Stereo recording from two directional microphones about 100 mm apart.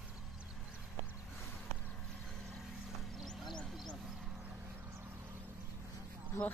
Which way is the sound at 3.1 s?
Centre (ahead or behind).